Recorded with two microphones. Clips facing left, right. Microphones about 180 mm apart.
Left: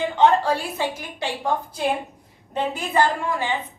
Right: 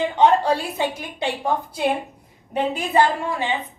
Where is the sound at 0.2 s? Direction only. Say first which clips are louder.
Right 1 dB; 20° right (ahead or behind).